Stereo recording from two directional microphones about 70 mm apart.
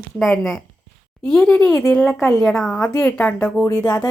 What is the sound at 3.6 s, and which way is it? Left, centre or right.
Speech, left.